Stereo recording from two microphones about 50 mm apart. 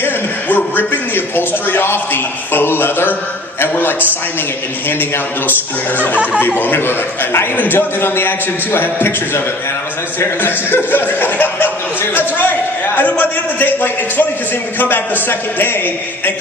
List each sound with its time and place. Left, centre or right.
0.0 s a sound: left
4.9 s a man's voice: left
7.5 s a man's voice: left
13.0 s a man's voice: left